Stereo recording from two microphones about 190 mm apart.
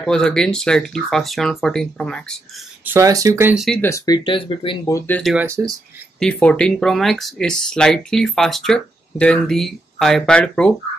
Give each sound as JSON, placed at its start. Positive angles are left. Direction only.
{"t": 0.0, "sound": "speech", "side_deg": 5}
{"t": 2.8, "sound": "speech", "side_deg": -15}
{"t": 3.5, "sound": "speech", "side_deg": 0}
{"t": 3.8, "sound": "speech", "side_deg": 20}
{"t": 5.2, "sound": "speech", "side_deg": -5}